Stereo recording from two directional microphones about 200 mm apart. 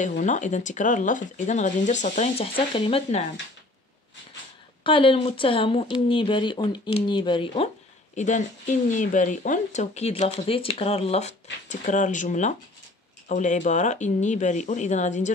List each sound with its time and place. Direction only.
0.0 s speech: 40° left (ahead or behind)
4.8 s speech: 25° left (ahead or behind)
8.2 s speech: 35° left (ahead or behind)